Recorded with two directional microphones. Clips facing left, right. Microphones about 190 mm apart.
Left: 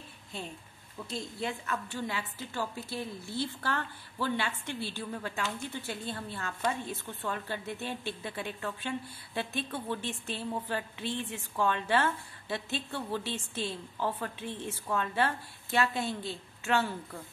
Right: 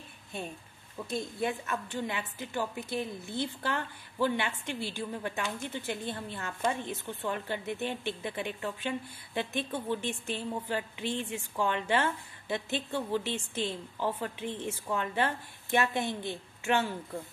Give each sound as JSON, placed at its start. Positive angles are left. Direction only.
{"t": 1.4, "sound": "a woman's voice", "side_deg": -20}